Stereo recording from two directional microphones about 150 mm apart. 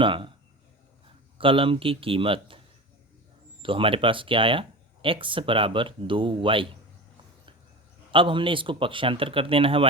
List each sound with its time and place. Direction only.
0.0 s speech: 35° right (ahead or behind)
1.4 s a man's voice: 35° right (ahead or behind)
3.6 s a man's voice: 35° right (ahead or behind)
8.1 s a man's voice: 35° right (ahead or behind)